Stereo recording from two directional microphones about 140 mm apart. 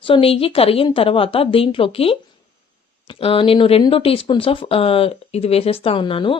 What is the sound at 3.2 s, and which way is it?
A woman's voice, 40° left (ahead or behind).